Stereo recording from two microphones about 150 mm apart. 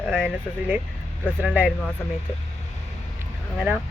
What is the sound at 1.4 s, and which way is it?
Speech, 10° right (ahead or behind).